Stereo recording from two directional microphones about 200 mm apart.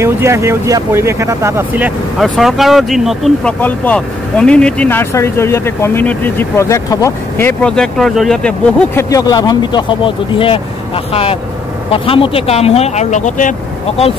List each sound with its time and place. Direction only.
0.0 s speech: 15° right (ahead or behind); by 9.0 s 5° left (ahead or behind)
9.1 s speech: 20° left (ahead or behind)
11.9 s speech: 25° left (ahead or behind)